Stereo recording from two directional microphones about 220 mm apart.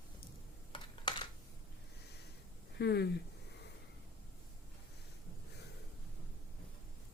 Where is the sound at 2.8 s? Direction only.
50° left (ahead or behind).